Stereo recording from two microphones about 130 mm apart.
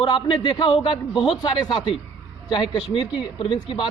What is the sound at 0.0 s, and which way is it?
Speech, 35° left (ahead or behind).